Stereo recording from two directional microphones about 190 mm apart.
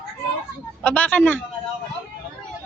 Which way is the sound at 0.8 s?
5° left (ahead or behind).